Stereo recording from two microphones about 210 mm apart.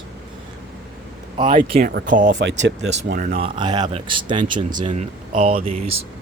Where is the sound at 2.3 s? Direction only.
55° right (ahead or behind).